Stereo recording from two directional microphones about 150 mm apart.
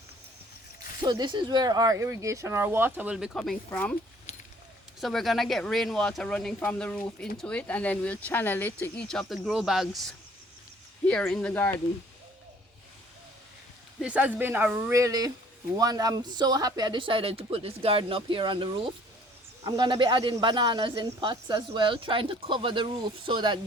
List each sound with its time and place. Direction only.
1.0 s speech: 30° right (ahead or behind); by 3.9 s 10° left (ahead or behind)
4.3 s a sound: 50° left (ahead or behind)
4.9 s speech: centre (ahead or behind)
14.0 s speech: 10° right (ahead or behind); by 23.6 s 35° right (ahead or behind)